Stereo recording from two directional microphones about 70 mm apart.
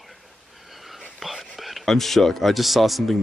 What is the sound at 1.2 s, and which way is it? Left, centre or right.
Speech, centre.